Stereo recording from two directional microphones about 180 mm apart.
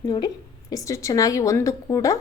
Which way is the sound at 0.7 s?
20° left (ahead or behind).